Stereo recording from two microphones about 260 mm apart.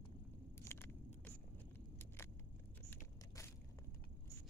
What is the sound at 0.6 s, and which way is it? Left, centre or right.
Vehicle, centre.